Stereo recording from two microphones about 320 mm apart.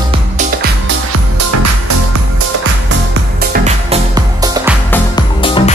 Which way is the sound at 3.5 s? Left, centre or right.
Centre.